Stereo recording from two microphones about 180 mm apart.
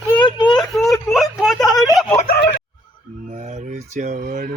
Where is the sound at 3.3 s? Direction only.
40° right (ahead or behind).